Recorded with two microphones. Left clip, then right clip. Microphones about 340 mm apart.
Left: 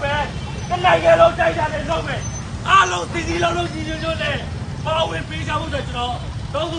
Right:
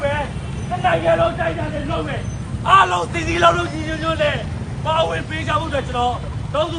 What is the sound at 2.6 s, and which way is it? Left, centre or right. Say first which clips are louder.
Speech: right 1 dB; centre.